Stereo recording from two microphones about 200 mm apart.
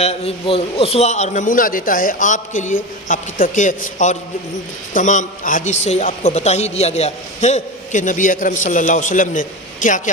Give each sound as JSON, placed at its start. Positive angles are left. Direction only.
{"t": 0.0, "sound": "a man's voice", "side_deg": 30}